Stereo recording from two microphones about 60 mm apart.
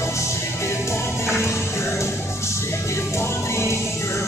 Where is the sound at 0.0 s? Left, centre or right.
Left.